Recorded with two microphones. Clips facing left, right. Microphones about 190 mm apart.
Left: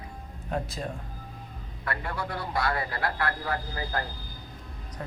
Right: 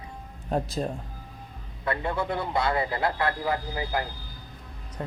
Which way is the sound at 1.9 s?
20° right (ahead or behind).